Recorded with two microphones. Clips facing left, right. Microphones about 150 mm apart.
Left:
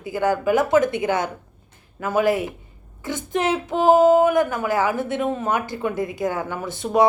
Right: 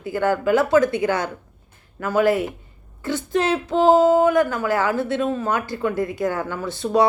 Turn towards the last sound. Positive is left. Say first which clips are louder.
# even
turn(degrees=20)  # may be behind; listen again after turning